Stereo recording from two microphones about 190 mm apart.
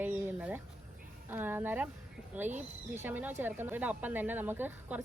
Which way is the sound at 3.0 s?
10° right (ahead or behind).